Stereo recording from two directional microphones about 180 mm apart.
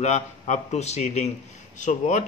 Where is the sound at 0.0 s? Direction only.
40° left (ahead or behind).